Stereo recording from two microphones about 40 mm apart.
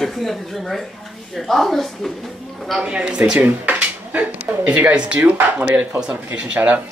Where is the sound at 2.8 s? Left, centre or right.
Right.